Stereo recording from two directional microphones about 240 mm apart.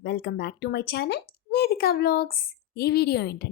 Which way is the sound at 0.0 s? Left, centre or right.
Left.